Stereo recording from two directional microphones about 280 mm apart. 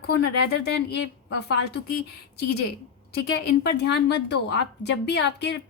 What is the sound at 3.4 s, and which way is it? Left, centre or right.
A woman's voice, left.